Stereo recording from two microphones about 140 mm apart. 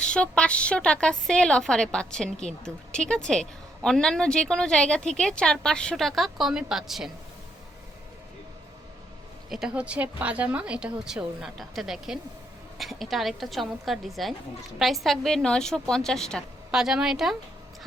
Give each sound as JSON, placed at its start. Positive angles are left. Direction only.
{"t": 0.0, "sound": "a woman's voice", "side_deg": 5}
{"t": 9.5, "sound": "a woman's voice", "side_deg": -5}